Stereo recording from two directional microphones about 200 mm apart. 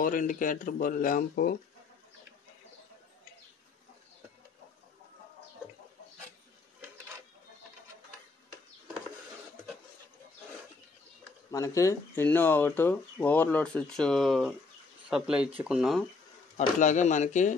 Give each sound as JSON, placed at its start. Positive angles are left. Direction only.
{"t": 0.0, "sound": "speech", "side_deg": 40}
{"t": 11.5, "sound": "speech", "side_deg": 15}
{"t": 16.5, "sound": "speech", "side_deg": 35}